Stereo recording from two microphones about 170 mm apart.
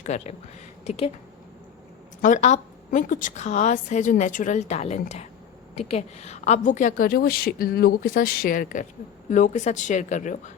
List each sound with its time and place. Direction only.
0.0 s a woman's voice: 40° left (ahead or behind)
2.2 s a woman's voice: 45° left (ahead or behind)